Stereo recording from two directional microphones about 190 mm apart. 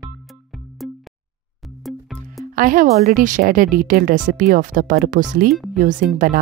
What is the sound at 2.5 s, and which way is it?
A woman's voice, 45° right (ahead or behind).